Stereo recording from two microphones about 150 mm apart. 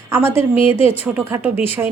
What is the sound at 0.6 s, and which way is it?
Speech, 40° left (ahead or behind).